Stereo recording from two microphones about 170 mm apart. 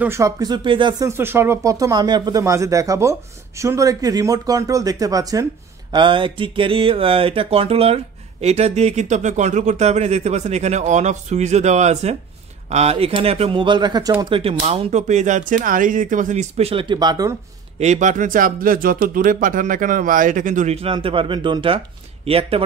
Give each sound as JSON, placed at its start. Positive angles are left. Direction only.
{"t": 0.0, "sound": "speech", "side_deg": -15}
{"t": 14.3, "sound": "speech", "side_deg": -35}
{"t": 17.7, "sound": "speech", "side_deg": -45}